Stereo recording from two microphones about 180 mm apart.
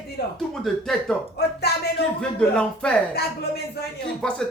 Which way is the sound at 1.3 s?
65° left (ahead or behind).